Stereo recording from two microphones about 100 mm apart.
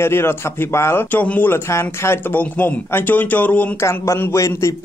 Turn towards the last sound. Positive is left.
turn(degrees=30)  # may be behind; listen again after turning